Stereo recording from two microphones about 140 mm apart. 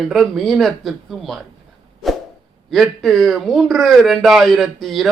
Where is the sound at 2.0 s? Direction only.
Centre (ahead or behind).